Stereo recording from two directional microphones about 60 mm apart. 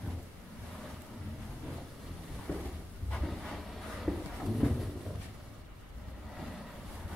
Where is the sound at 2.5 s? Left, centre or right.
Left.